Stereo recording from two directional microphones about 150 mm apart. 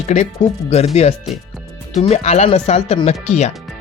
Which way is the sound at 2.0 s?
45° left (ahead or behind).